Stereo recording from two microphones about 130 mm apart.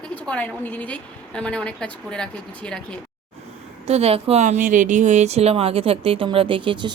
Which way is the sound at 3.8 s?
50° right (ahead or behind).